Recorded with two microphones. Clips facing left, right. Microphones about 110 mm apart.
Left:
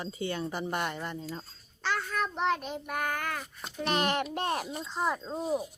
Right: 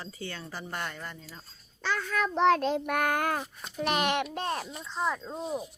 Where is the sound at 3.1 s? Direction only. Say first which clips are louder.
Right 5 dB; 50° right (ahead or behind).